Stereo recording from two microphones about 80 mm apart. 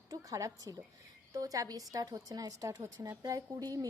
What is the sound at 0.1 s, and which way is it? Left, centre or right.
A woman's voice, right.